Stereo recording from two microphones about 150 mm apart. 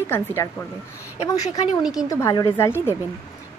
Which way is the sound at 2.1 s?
25° left (ahead or behind).